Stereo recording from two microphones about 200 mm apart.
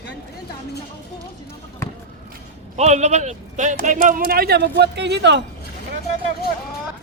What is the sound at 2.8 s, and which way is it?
A man's voice, 35° right (ahead or behind).